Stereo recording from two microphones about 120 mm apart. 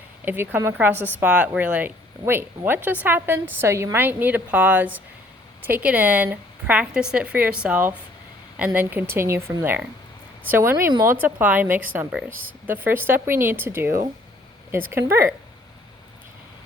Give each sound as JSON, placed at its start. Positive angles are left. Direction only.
{"t": 0.3, "sound": "a woman's voice", "side_deg": -20}